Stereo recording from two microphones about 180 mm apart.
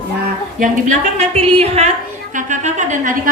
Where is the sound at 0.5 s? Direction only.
45° right (ahead or behind).